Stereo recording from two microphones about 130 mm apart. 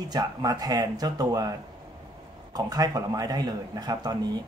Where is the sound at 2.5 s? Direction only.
30° right (ahead or behind).